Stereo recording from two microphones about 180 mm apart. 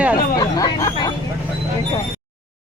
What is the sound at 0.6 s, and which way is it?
Speech, 20° left (ahead or behind).